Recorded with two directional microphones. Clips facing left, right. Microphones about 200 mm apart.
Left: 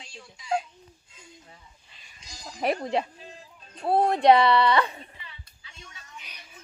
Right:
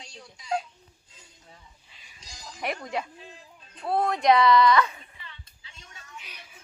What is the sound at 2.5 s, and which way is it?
Speech, 35° left (ahead or behind).